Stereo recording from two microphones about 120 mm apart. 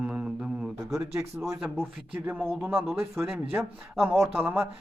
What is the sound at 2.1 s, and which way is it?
A man's voice, 15° right (ahead or behind).